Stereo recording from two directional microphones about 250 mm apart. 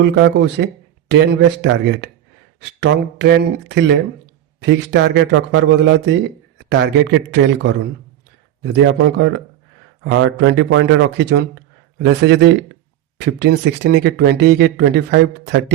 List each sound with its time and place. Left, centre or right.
0.0 s speech: right